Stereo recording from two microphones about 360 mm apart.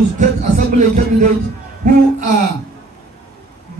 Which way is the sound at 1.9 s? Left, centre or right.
Right.